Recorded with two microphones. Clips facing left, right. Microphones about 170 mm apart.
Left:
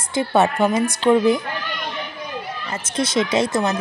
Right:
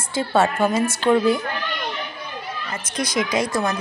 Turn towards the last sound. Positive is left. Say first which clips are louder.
# left 2 dB
turn(degrees=20)  # may be behind; listen again after turning